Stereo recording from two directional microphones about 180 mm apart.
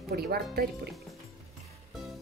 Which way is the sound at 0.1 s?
60° right (ahead or behind).